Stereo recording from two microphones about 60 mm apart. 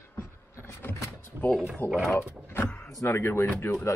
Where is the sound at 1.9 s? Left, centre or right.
Centre.